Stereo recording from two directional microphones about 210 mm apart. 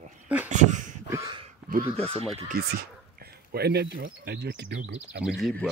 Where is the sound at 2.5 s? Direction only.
45° right (ahead or behind).